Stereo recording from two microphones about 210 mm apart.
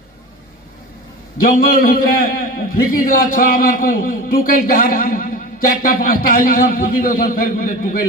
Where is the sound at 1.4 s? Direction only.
45° left (ahead or behind).